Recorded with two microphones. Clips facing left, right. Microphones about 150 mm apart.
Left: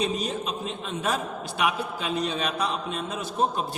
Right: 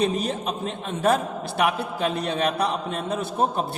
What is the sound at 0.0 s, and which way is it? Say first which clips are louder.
A man's voice: right 4 dB; 55° right (ahead or behind).